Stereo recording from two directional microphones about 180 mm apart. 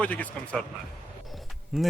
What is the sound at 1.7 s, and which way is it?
Speech, centre (ahead or behind).